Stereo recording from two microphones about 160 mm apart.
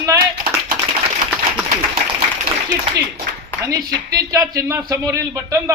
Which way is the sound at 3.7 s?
20° right (ahead or behind).